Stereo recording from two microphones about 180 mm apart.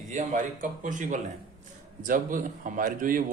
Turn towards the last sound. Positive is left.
turn(degrees=-50)  # may be behind; listen again after turning